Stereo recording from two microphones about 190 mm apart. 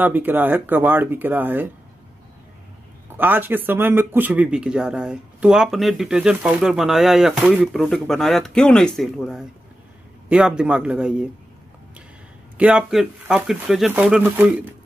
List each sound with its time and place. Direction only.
0.0 s speech: 10° right (ahead or behind)
3.2 s a man's voice: 10° right (ahead or behind)
12.5 s speech: 5° right (ahead or behind)